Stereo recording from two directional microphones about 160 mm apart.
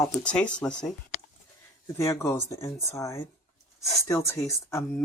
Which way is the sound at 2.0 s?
20° left (ahead or behind).